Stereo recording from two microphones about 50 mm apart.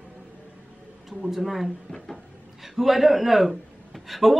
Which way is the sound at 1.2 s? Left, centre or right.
Centre.